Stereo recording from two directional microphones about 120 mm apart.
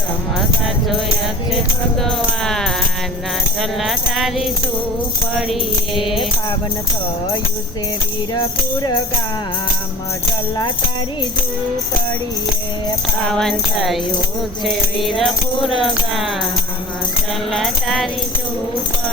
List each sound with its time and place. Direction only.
2.0 s music: 5° left (ahead or behind)
5.9 s music: 45° left (ahead or behind)
8.3 s speech: 30° left (ahead or behind)
13.2 s music: 5° left (ahead or behind)
17.5 s music: centre (ahead or behind)